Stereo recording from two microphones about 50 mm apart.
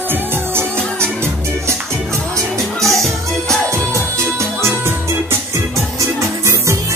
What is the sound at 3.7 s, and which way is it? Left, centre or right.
Music, right.